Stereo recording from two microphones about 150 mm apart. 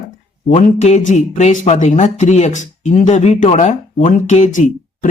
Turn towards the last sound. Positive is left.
turn(degrees=55)  # may be behind; listen again after turning